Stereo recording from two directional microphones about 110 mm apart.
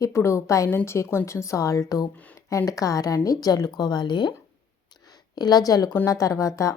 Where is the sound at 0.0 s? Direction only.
25° left (ahead or behind).